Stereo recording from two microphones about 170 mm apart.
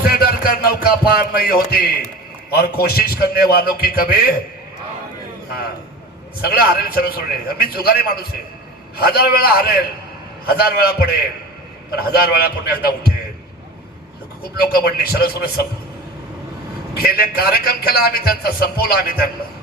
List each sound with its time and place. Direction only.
0.0 s a man's voice: 60° left (ahead or behind)
6.4 s a man's voice: 65° left (ahead or behind)
11.9 s a man's voice: 65° left (ahead or behind)
14.6 s a man's voice: 65° left (ahead or behind)
16.9 s a man's voice: 65° left (ahead or behind)